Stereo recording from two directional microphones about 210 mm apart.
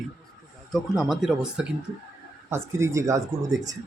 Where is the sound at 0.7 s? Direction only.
Centre (ahead or behind).